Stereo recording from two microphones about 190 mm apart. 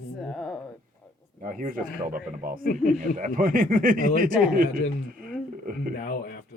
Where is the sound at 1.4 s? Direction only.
45° right (ahead or behind).